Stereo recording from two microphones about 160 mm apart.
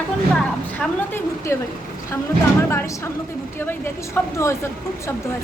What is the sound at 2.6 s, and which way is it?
Speech, 15° left (ahead or behind).